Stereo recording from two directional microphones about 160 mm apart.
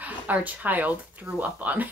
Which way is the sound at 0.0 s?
10° right (ahead or behind).